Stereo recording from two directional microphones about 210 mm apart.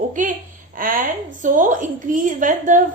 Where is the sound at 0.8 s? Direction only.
40° right (ahead or behind).